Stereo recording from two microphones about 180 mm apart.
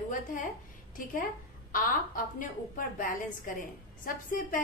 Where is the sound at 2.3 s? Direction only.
50° left (ahead or behind).